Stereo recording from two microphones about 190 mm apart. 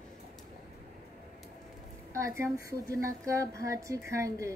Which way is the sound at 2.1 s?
15° right (ahead or behind).